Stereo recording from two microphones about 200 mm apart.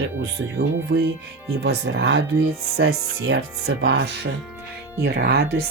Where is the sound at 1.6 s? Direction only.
60° right (ahead or behind).